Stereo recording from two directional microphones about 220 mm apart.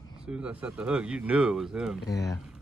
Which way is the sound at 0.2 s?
5° right (ahead or behind).